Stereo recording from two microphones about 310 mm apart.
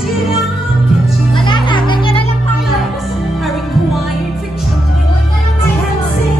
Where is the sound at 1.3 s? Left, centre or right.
Centre.